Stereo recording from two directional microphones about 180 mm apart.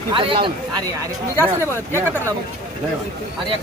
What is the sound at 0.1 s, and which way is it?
Speech, 30° right (ahead or behind).